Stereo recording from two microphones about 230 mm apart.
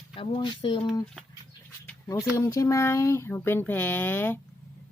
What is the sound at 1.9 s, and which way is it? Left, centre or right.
Speech, centre.